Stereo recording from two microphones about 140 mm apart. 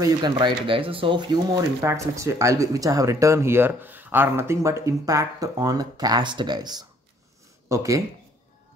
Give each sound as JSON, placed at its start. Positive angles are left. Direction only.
{"t": 0.0, "sound": "speech", "side_deg": -30}
{"t": 1.8, "sound": "speech", "side_deg": -20}